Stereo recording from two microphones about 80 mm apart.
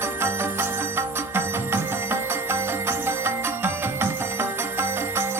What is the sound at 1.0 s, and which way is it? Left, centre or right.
Music, right.